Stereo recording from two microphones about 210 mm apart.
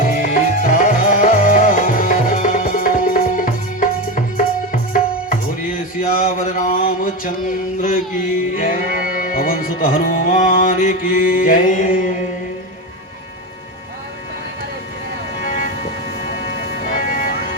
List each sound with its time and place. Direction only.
0.0 s music: 40° left (ahead or behind)
15.4 s a sound: 40° left (ahead or behind)
16.8 s music: 40° left (ahead or behind)